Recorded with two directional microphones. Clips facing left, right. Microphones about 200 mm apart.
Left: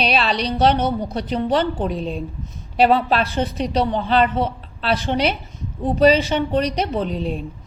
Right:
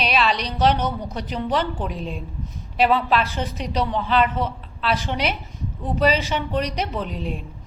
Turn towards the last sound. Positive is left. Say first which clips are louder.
# left 5 dB
turn(degrees=35)  # may be behind; listen again after turning